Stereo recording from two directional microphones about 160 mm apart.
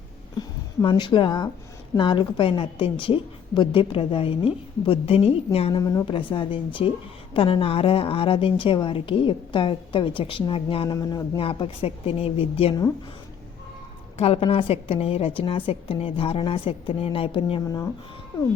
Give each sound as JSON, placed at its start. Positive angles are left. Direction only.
{"t": 0.3, "sound": "a sound", "side_deg": 25}
{"t": 2.0, "sound": "a woman's voice", "side_deg": 30}
{"t": 5.8, "sound": "a woman's voice", "side_deg": 20}
{"t": 10.9, "sound": "speech", "side_deg": 20}
{"t": 11.3, "sound": "a woman's voice", "side_deg": 35}
{"t": 14.2, "sound": "a woman's voice", "side_deg": 40}